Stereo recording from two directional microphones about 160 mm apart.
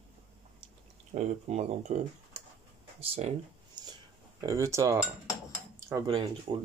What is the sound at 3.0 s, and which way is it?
Speech, 40° right (ahead or behind).